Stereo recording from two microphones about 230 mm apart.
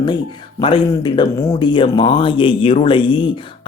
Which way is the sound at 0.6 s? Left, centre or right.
Left.